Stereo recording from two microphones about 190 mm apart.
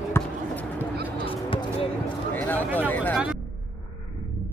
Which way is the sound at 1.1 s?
30° left (ahead or behind).